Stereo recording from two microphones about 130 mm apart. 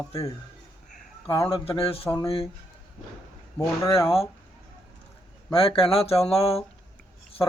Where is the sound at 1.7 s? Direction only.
45° left (ahead or behind).